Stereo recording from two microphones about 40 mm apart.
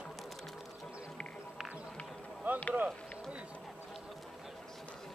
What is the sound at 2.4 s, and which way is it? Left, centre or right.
Run, right.